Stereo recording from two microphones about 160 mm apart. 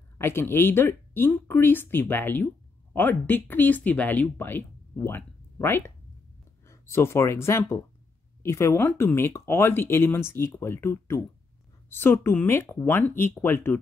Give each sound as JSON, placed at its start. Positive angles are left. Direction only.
{"t": 0.2, "sound": "speech", "side_deg": 15}